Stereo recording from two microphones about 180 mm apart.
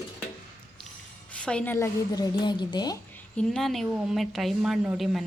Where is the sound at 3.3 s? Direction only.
5° left (ahead or behind).